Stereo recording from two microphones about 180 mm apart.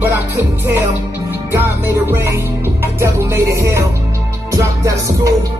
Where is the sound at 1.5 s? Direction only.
15° right (ahead or behind).